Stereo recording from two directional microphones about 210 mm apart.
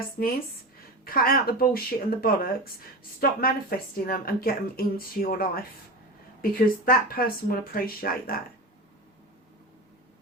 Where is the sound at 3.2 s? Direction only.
45° left (ahead or behind).